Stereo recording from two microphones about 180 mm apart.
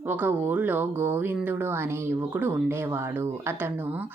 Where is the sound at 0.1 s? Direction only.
10° right (ahead or behind).